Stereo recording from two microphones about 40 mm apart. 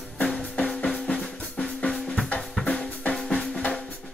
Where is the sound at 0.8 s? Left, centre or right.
Centre.